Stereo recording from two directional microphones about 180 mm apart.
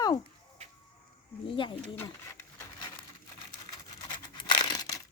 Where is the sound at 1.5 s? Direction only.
25° left (ahead or behind).